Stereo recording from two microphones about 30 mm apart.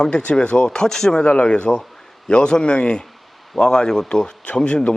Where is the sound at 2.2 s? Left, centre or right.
Left.